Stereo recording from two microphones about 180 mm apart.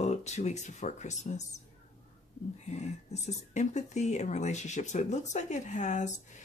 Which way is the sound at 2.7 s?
40° left (ahead or behind).